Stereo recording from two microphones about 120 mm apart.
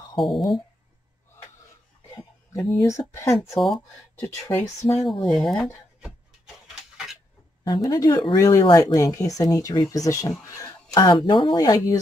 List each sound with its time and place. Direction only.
0.2 s speech: centre (ahead or behind)
2.7 s speech: 25° left (ahead or behind)
3.5 s speech: centre (ahead or behind)
4.2 s speech: 20° left (ahead or behind)
4.9 s speech: centre (ahead or behind)
7.6 s speech: 35° left (ahead or behind)